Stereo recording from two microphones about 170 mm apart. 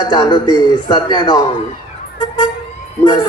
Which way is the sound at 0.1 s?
25° left (ahead or behind).